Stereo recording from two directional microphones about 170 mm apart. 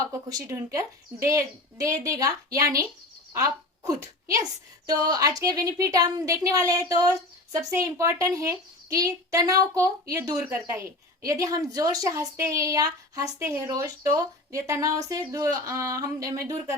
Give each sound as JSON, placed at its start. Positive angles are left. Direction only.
{"t": 0.0, "sound": "a woman's voice", "side_deg": -20}